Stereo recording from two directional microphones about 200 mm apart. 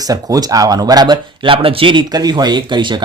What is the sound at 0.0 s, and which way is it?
A man's voice, 20° right (ahead or behind).